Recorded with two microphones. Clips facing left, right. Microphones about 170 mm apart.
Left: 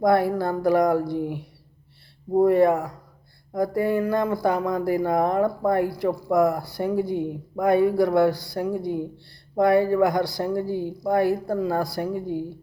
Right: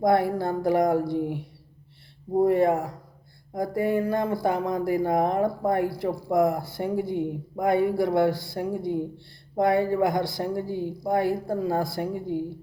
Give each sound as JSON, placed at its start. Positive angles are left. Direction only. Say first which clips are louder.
{"t": 0.0, "sound": "speech", "louder": "left 2 dB", "side_deg": -20}